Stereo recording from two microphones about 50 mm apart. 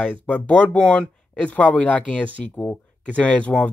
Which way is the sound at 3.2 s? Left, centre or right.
Left.